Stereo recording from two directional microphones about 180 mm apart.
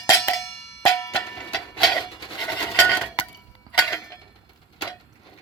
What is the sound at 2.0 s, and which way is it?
Rub, 25° left (ahead or behind).